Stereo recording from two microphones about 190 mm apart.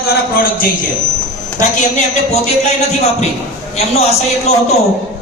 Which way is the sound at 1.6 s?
40° left (ahead or behind).